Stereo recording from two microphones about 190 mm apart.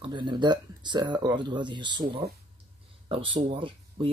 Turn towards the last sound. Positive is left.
turn(degrees=-30)  # may be behind; listen again after turning